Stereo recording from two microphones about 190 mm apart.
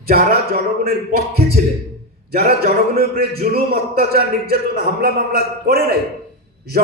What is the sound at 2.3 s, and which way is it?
A man's voice, 55° right (ahead or behind).